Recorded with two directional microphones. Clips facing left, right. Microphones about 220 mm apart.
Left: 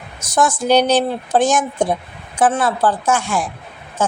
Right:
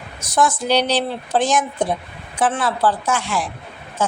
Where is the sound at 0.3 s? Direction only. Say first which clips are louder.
Left 3 dB; 45° left (ahead or behind).